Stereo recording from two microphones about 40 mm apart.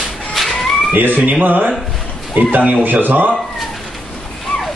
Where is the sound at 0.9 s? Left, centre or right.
Right.